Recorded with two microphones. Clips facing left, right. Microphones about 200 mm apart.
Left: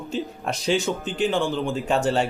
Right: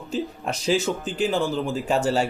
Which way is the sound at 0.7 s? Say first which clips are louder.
Right 1 dB; 35° right (ahead or behind).